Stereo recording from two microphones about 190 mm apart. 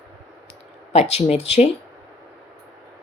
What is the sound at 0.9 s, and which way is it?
Speech, 35° left (ahead or behind).